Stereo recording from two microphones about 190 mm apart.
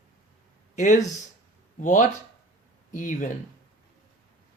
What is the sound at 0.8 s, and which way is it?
Speech, 40° left (ahead or behind).